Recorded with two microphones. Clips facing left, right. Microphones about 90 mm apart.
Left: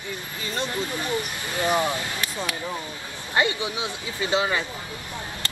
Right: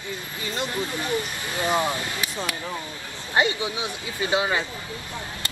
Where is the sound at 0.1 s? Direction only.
20° right (ahead or behind).